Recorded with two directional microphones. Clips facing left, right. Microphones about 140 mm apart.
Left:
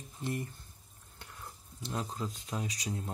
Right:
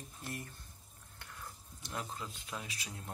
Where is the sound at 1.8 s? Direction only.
30° left (ahead or behind).